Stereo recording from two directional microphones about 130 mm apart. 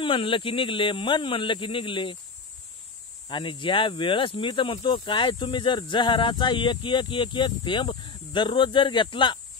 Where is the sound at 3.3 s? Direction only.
40° left (ahead or behind).